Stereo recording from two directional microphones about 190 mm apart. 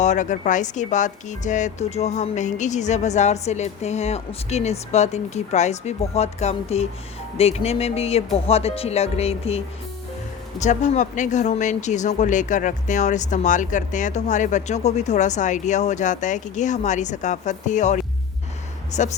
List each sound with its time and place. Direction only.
0.0 s speech: 40° left (ahead or behind)